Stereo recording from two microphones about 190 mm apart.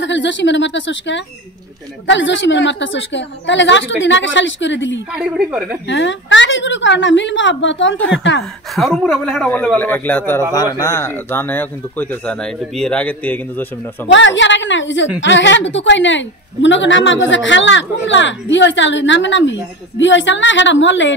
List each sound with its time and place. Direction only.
0.0 s a woman's voice: 75° left (ahead or behind)
5.1 s a woman's voice: 5° right (ahead or behind)
5.9 s a woman's voice: 75° left (ahead or behind)
8.7 s speech: centre (ahead or behind)
14.1 s a woman's voice: 75° left (ahead or behind)